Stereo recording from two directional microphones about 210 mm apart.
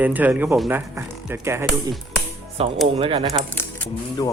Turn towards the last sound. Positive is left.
turn(degrees=10)  # may be behind; listen again after turning